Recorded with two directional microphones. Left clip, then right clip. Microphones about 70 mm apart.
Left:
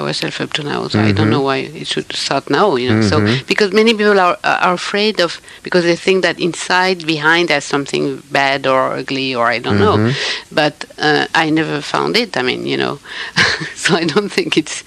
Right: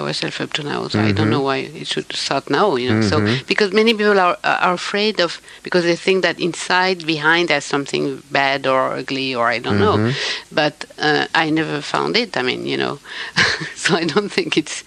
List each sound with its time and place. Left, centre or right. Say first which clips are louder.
0.0 s speech: left 3 dB; left